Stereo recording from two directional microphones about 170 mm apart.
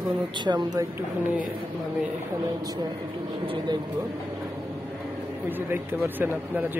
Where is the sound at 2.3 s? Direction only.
25° right (ahead or behind).